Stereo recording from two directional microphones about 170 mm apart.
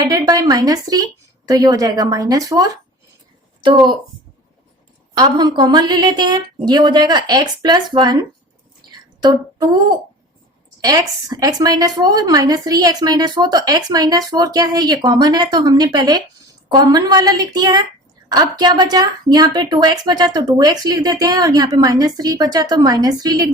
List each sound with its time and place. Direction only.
0.1 s a woman's voice: 25° right (ahead or behind)
5.1 s a woman's voice: 25° right (ahead or behind)
8.8 s a sound: 25° right (ahead or behind)
9.2 s a woman's voice: 25° right (ahead or behind)